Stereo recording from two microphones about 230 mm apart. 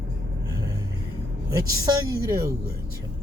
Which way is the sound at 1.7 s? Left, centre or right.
Centre.